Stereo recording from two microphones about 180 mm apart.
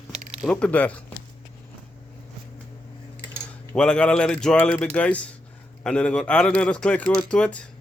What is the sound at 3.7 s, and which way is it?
Speech, 5° left (ahead or behind).